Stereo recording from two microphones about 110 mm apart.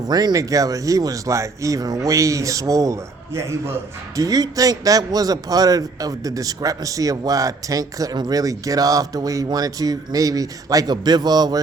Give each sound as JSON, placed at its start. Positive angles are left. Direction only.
{"t": 0.1, "sound": "speech", "side_deg": -40}